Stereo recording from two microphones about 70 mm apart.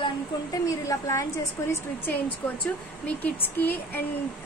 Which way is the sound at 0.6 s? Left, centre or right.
Left.